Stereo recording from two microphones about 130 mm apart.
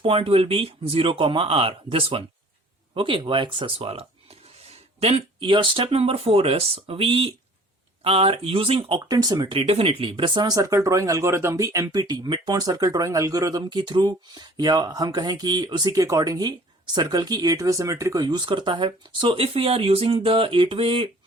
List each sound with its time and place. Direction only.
0.0 s speech: 45° right (ahead or behind)
9.0 s speech: 30° right (ahead or behind)